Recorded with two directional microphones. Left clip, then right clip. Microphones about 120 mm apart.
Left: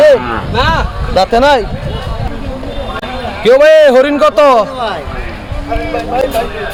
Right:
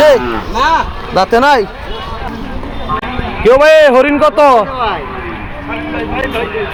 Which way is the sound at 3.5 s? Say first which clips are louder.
Left 1 dB; 25° left (ahead or behind).